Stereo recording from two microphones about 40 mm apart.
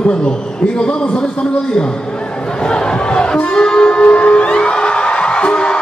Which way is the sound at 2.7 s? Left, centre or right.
Left.